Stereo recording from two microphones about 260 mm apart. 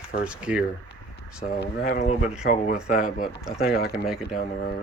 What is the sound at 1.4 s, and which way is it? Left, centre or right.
Speech, left.